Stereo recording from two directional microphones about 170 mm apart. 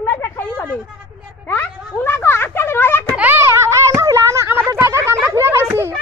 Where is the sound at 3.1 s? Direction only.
10° right (ahead or behind).